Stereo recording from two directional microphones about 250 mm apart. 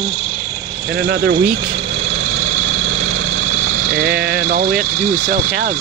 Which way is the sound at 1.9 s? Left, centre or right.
Right.